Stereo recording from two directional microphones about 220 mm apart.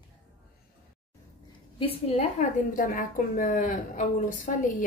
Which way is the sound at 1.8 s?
25° left (ahead or behind).